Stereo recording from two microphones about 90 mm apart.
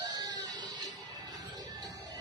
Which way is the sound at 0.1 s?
45° right (ahead or behind).